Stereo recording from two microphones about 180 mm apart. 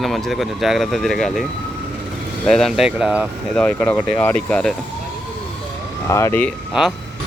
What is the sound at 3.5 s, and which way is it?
Speech, 5° left (ahead or behind).